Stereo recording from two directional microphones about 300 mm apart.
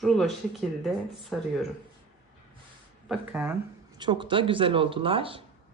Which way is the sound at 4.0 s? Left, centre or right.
Centre.